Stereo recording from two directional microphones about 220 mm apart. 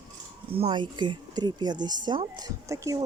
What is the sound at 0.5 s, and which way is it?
Speech, 25° right (ahead or behind).